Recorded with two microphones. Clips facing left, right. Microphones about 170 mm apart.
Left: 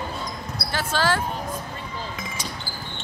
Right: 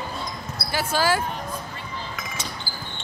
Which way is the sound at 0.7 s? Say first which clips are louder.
Right 1 dB; 10° right (ahead or behind).